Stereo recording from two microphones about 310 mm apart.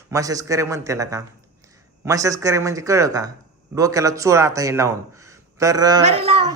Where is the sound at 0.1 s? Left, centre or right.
Centre.